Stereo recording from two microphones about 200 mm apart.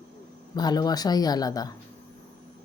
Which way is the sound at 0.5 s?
20° left (ahead or behind).